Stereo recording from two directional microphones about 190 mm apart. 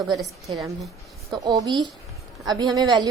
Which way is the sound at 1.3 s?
20° right (ahead or behind).